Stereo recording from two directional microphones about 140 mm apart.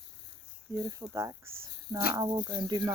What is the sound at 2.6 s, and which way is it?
Speech, 30° right (ahead or behind).